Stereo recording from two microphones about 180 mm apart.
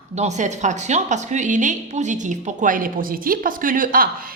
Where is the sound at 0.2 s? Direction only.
40° right (ahead or behind).